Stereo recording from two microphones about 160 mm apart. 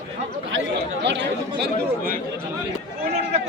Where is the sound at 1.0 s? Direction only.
90° right.